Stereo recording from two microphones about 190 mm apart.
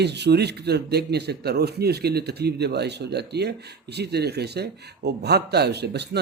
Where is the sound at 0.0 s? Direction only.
60° right (ahead or behind).